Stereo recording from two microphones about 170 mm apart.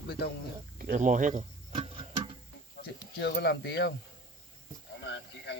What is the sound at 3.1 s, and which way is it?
Speech, 80° left.